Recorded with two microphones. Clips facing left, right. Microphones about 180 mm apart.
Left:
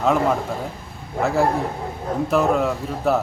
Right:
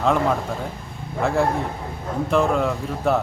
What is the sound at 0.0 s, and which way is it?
Speech, 5° left (ahead or behind).